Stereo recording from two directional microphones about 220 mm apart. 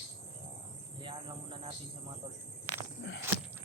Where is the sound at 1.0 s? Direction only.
20° right (ahead or behind).